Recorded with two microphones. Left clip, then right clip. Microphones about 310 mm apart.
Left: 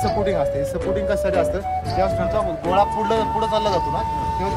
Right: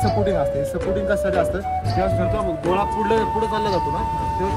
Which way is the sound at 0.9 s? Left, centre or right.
Centre.